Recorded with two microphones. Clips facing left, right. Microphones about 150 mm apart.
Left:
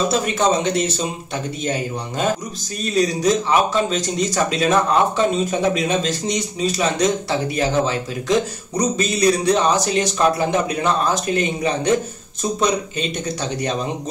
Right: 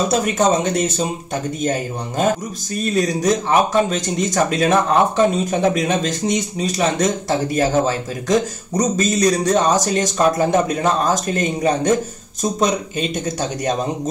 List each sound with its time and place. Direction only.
0.1 s speech: 45° right (ahead or behind)